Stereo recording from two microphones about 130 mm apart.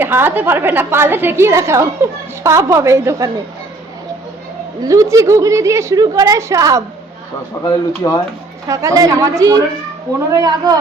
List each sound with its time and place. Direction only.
0.0 s a woman's voice: 15° right (ahead or behind)
4.8 s a woman's voice: 25° right (ahead or behind)
7.6 s speech: 35° left (ahead or behind)
8.6 s a woman's voice: 25° right (ahead or behind)